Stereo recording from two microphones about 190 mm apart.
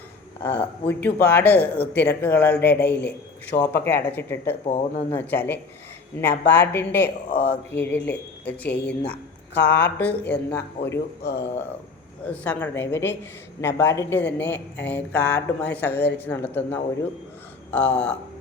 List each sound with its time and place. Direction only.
0.4 s speech: 10° left (ahead or behind)
3.5 s speech: 50° left (ahead or behind)
3.8 s speech: 10° left (ahead or behind)
4.6 s speech: 30° left (ahead or behind)
5.1 s speech: 10° left (ahead or behind)
11.2 s speech: 60° left (ahead or behind)
12.3 s speech: 10° left (ahead or behind)
15.9 s speech: 60° left (ahead or behind)
16.1 s speech: 10° left (ahead or behind)